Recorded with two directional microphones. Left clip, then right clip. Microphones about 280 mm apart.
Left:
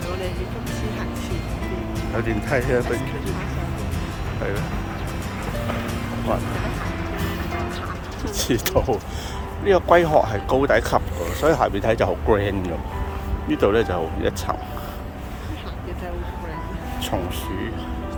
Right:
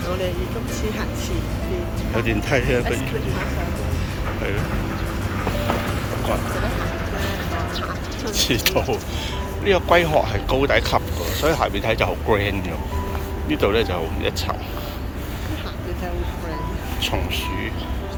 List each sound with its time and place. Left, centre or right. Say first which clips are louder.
2.1 s speech: right 2 dB; centre
8.4 s speech: right 2 dB; left
17.0 s speech: right 3 dB; left